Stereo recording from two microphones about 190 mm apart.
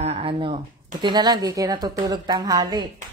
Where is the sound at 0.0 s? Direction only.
30° right (ahead or behind).